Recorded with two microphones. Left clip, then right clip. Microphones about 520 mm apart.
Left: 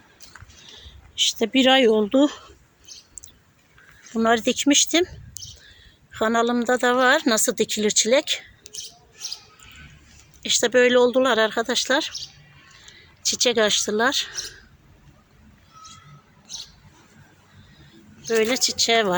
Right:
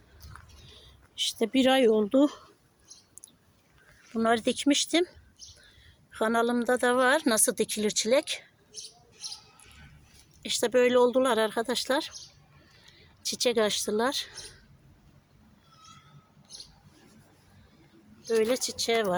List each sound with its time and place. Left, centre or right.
0.8 s speech: right
4.1 s a woman's voice: right
10.4 s speech: right
13.2 s speech: right
18.2 s speech: right